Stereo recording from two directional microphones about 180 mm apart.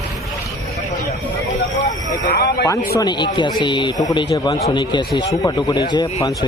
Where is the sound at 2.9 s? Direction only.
25° left (ahead or behind).